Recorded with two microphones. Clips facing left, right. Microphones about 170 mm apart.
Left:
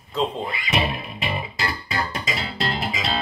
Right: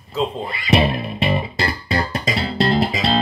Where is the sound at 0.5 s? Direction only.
35° right (ahead or behind).